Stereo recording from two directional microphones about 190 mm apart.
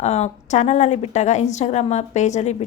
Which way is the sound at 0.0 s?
35° left (ahead or behind).